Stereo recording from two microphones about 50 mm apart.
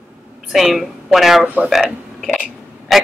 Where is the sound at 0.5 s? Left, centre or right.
Centre.